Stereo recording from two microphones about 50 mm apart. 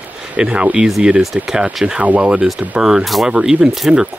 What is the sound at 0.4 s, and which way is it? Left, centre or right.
Speech, centre.